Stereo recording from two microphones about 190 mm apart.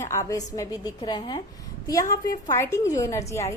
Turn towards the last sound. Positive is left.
turn(degrees=15)  # may be behind; listen again after turning